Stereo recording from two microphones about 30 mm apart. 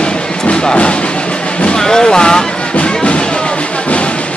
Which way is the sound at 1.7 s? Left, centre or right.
Left.